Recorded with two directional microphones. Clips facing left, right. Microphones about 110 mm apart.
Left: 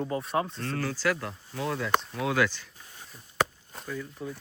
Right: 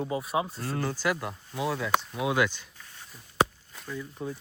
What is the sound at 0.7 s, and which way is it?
Speech, 20° right (ahead or behind).